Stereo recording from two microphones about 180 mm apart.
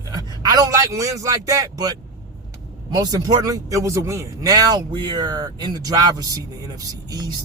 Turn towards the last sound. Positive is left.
turn(degrees=-20)  # may be behind; listen again after turning